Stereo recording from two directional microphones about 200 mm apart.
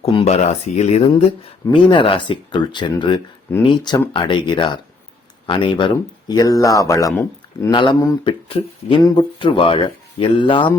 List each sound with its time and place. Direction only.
0.0 s speech: 30° left (ahead or behind)